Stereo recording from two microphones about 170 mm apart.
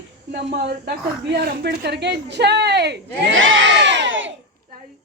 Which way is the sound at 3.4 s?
90° right.